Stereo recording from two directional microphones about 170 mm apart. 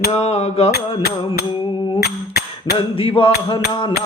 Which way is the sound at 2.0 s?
65° left (ahead or behind).